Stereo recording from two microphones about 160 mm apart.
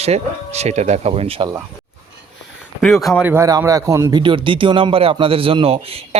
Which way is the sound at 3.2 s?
15° right (ahead or behind).